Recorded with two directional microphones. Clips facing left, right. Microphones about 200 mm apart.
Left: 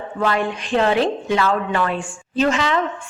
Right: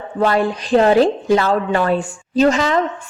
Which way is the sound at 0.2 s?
35° right (ahead or behind).